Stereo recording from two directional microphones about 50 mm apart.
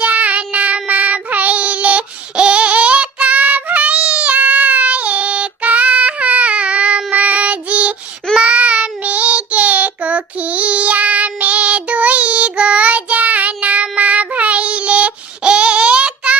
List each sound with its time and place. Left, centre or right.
0.0 s child singing: right